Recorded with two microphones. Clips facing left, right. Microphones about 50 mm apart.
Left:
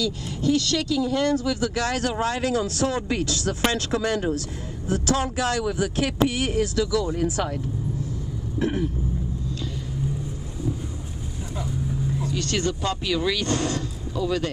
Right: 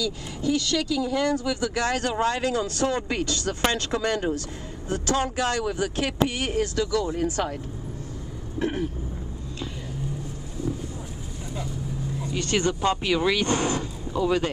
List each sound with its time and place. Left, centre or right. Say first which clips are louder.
0.4 s speech: left 2 dB; centre
8.5 s throat clearing: left 2 dB; centre
12.3 s speech: right 4 dB; centre